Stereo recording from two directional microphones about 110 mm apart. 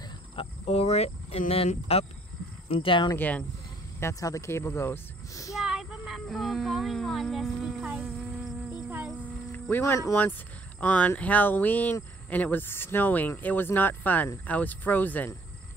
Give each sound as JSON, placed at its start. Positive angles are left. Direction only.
{"t": 0.4, "sound": "speech", "side_deg": 70}
{"t": 2.7, "sound": "speech", "side_deg": 55}
{"t": 3.2, "sound": "speech", "side_deg": 15}
{"t": 4.0, "sound": "speech", "side_deg": 30}
{"t": 5.6, "sound": "a sound", "side_deg": -5}
{"t": 8.7, "sound": "music", "side_deg": -10}
{"t": 9.5, "sound": "speech", "side_deg": 20}
{"t": 10.8, "sound": "speech", "side_deg": 15}